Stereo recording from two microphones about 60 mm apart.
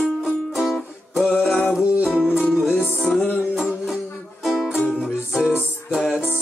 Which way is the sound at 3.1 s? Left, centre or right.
Centre.